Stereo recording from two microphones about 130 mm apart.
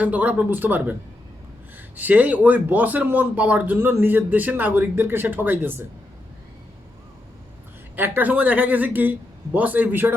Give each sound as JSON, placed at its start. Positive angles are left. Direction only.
{"t": 0.0, "sound": "a man's voice", "side_deg": -10}
{"t": 2.0, "sound": "a man's voice", "side_deg": -10}
{"t": 7.9, "sound": "a man's voice", "side_deg": -15}